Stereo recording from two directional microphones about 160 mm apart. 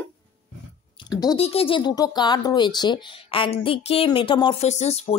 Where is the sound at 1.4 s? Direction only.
35° left (ahead or behind).